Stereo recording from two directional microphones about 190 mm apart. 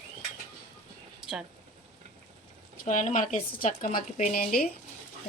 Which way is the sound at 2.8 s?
40° left (ahead or behind).